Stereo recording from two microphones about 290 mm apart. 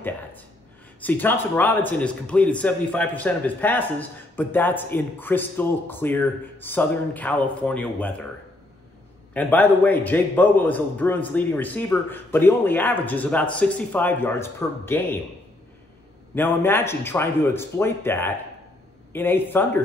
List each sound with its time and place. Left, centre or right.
1.0 s a man's voice: centre
9.3 s a man's voice: centre
16.3 s speech: centre